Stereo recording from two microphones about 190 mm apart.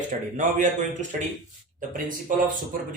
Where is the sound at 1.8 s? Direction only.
45° right (ahead or behind).